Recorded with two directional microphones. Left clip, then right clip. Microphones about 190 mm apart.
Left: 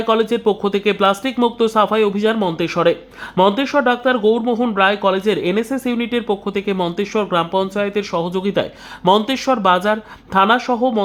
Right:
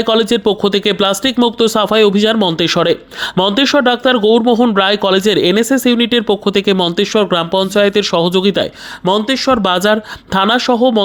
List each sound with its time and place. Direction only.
0.1 s speech: 30° right (ahead or behind)
9.0 s speech: 15° right (ahead or behind)
9.6 s speech: 30° right (ahead or behind)